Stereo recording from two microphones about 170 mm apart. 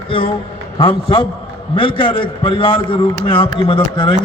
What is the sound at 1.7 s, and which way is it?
Speech, 30° left (ahead or behind).